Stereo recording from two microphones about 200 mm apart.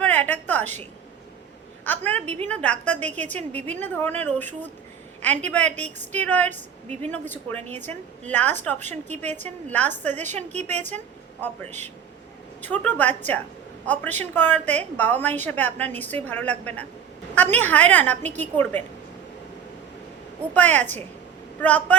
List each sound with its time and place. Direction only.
0.0 s a sound: 10° left (ahead or behind)
0.6 s a woman's voice: 35° right (ahead or behind)
1.8 s a woman's voice: 10° left (ahead or behind)
9.3 s a woman's voice: 35° right (ahead or behind)
10.0 s a woman's voice: 10° left (ahead or behind)
10.2 s a woman's voice: 35° right (ahead or behind)
10.6 s a woman's voice: 10° left (ahead or behind)
20.5 s a woman's voice: 10° left (ahead or behind)